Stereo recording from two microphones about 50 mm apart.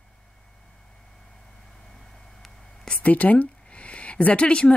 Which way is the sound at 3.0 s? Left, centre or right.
Left.